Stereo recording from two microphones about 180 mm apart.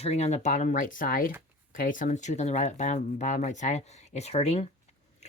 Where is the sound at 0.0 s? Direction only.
35° left (ahead or behind).